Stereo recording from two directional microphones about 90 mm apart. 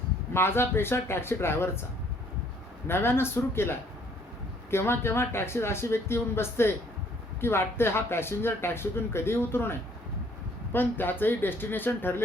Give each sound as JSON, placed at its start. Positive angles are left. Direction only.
{"t": 0.3, "sound": "speech", "side_deg": 25}
{"t": 2.8, "sound": "speech", "side_deg": 25}